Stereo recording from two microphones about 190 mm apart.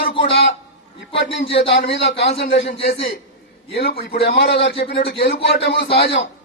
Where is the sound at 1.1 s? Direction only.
60° left (ahead or behind).